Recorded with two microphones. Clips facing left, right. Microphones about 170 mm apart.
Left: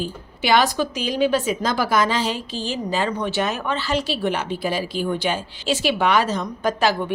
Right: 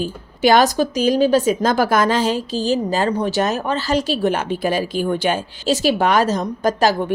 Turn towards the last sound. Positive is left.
turn(degrees=-40)  # may be behind; listen again after turning